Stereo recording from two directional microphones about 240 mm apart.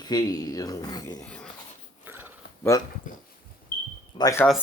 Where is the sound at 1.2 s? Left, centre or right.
Centre.